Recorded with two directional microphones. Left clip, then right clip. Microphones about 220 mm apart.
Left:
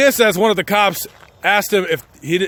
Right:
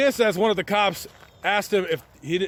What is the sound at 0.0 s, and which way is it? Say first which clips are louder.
A man's voice: left 7 dB; 20° left (ahead or behind).